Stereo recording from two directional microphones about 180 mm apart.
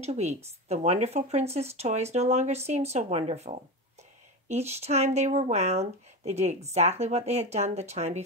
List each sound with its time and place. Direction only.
0.0 s speech: 35° right (ahead or behind)